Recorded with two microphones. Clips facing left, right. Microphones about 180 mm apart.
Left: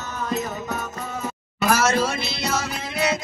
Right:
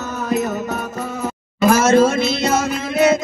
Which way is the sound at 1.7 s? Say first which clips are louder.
Right 9 dB; 50° right (ahead or behind).